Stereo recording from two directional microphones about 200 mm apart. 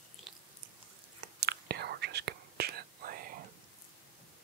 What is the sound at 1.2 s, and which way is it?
Whispering, 55° right (ahead or behind).